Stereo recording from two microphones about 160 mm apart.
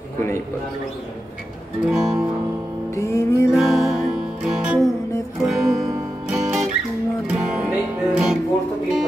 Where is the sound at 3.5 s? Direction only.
Centre (ahead or behind).